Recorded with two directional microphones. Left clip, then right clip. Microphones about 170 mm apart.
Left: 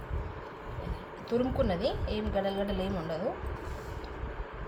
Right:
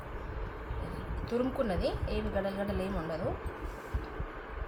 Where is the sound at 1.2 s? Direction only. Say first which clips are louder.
Left 3 dB; 10° left (ahead or behind).